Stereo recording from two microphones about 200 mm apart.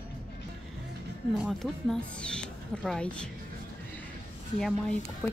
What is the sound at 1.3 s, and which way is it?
Speech, centre (ahead or behind).